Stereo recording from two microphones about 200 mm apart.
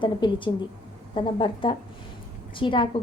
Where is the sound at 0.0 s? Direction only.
25° left (ahead or behind).